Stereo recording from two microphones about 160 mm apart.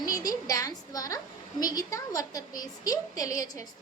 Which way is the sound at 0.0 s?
25° left (ahead or behind).